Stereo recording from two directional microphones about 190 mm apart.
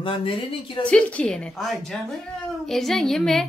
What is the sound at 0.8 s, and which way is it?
A woman's voice, 5° left (ahead or behind).